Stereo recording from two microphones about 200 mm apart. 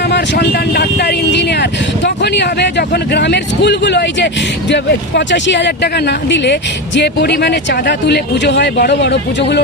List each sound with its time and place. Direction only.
0.0 s speech: 55° left (ahead or behind)